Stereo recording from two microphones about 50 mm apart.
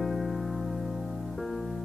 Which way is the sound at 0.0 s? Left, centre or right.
Centre.